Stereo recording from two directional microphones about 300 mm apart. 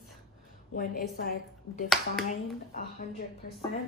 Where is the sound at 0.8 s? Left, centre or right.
Left.